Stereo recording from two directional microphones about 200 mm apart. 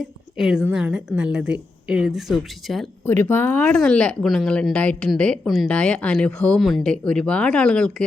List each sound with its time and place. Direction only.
0.3 s speech: 5° right (ahead or behind)
3.1 s speech: 10° left (ahead or behind)